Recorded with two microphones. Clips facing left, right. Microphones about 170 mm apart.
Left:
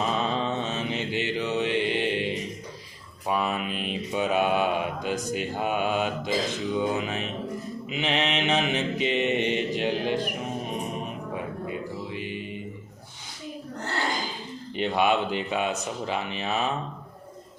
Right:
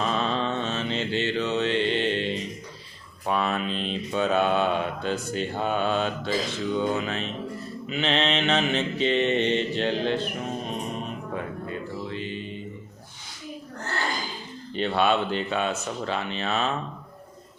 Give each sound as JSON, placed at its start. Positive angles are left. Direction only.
{"t": 0.0, "sound": "mantra", "side_deg": 15}
{"t": 11.6, "sound": "music", "side_deg": 10}
{"t": 14.8, "sound": "mantra", "side_deg": 15}